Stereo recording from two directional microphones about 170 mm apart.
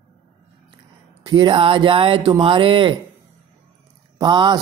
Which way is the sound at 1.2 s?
25° right (ahead or behind).